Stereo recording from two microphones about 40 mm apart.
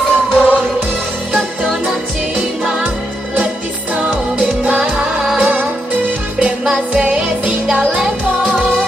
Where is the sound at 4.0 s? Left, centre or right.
Right.